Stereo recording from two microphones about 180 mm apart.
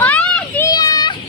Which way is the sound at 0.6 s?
20° left (ahead or behind).